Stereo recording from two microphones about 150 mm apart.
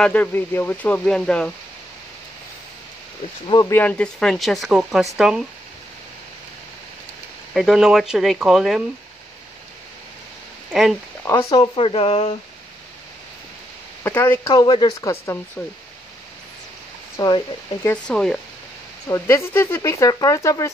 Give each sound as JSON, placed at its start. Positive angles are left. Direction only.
{"t": 0.0, "sound": "speech", "side_deg": 10}
{"t": 3.4, "sound": "speech", "side_deg": 25}
{"t": 3.7, "sound": "speech", "side_deg": 10}
{"t": 7.5, "sound": "speech", "side_deg": 0}
{"t": 10.7, "sound": "speech", "side_deg": 0}
{"t": 11.5, "sound": "speech", "side_deg": 35}
{"t": 14.5, "sound": "speech", "side_deg": 30}
{"t": 17.2, "sound": "speech", "side_deg": 25}
{"t": 18.0, "sound": "speech", "side_deg": 5}
{"t": 19.0, "sound": "speech", "side_deg": 20}